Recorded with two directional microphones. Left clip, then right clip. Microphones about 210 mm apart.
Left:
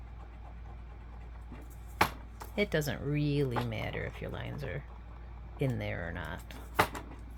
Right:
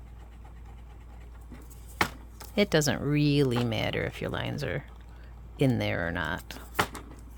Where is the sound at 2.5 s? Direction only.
50° right (ahead or behind).